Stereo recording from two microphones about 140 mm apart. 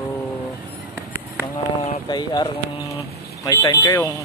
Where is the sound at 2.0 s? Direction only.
30° left (ahead or behind).